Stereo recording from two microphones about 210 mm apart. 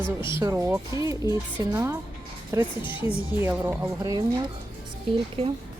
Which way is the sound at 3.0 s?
10° right (ahead or behind).